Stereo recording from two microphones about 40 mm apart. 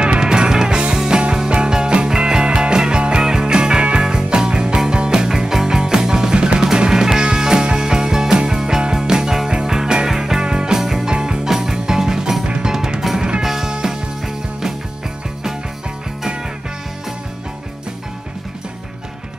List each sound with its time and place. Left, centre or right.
0.0 s music: right
10.8 s music: centre
11.1 s music: right
12.4 s music: right
13.0 s music: centre